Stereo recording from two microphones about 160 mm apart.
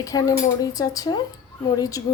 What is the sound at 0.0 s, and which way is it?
A woman's voice, 20° left (ahead or behind).